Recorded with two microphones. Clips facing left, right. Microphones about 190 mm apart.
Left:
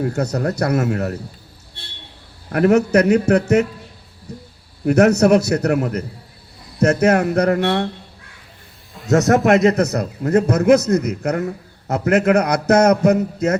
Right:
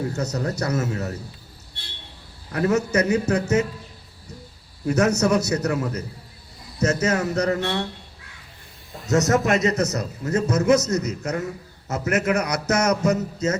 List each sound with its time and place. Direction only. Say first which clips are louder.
0.0 s a man's voice: left 5 dB; 55° left (ahead or behind)
2.5 s a man's voice: left 7 dB; 65° left (ahead or behind)
4.9 s a man's voice: left 7 dB; 60° left (ahead or behind)
9.6 s a man's voice: left 6 dB; 60° left (ahead or behind)